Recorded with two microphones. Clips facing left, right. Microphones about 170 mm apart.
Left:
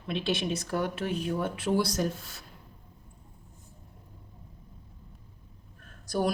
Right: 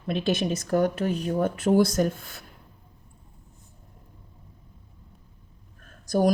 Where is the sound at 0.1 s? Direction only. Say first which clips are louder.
Right 4 dB; 45° right (ahead or behind).